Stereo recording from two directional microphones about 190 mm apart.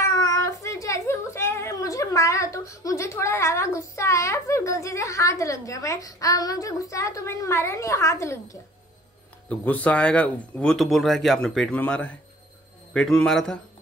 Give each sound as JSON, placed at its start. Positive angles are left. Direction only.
{"t": 0.0, "sound": "a child's voice", "side_deg": 20}